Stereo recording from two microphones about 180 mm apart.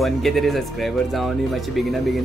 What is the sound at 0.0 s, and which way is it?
Speech, centre (ahead or behind).